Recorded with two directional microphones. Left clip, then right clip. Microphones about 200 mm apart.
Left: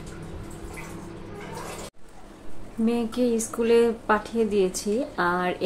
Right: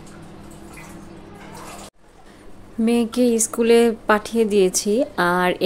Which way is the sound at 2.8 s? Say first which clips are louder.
Right 6 dB; 45° right (ahead or behind).